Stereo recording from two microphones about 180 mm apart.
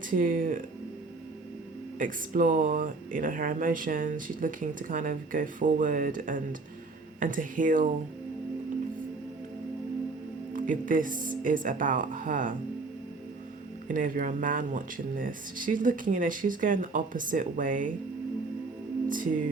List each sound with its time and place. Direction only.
0.1 s speech: 50° right (ahead or behind)
2.0 s speech: 50° right (ahead or behind)
10.5 s speech: 50° right (ahead or behind)
13.8 s speech: 50° right (ahead or behind)
19.0 s music: 50° right (ahead or behind)